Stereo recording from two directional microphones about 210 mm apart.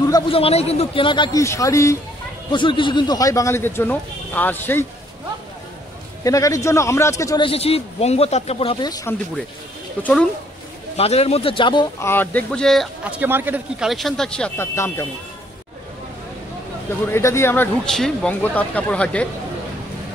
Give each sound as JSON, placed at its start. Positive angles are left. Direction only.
{"t": 0.1, "sound": "a man's voice", "side_deg": 25}
{"t": 6.2, "sound": "a man's voice", "side_deg": 15}
{"t": 10.0, "sound": "speech", "side_deg": 5}
{"t": 11.0, "sound": "speech", "side_deg": 30}
{"t": 13.2, "sound": "speech", "side_deg": -10}
{"t": 17.1, "sound": "speech", "side_deg": 10}